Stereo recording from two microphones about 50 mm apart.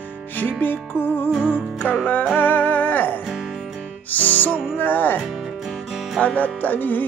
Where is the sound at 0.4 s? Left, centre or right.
Left.